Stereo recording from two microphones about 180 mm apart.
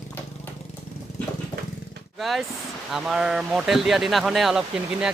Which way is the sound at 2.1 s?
Centre (ahead or behind).